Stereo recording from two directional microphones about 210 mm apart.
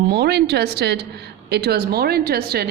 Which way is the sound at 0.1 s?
50° right (ahead or behind).